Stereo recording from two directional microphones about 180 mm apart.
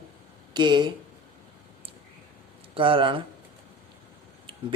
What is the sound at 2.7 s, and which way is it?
Speech, 30° right (ahead or behind).